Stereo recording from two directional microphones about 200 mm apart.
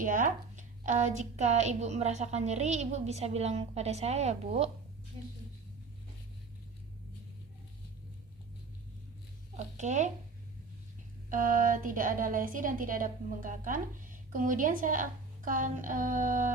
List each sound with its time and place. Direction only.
0.0 s a woman's voice: 40° right (ahead or behind); by 5.3 s 25° right (ahead or behind)
9.6 s a woman's voice: 35° right (ahead or behind)
11.3 s a woman's voice: 40° right (ahead or behind)